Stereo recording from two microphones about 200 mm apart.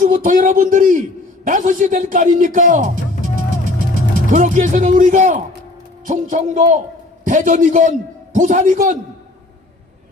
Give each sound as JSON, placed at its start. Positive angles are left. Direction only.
{"t": 0.0, "sound": "speech", "side_deg": -40}
{"t": 4.3, "sound": "speech", "side_deg": -40}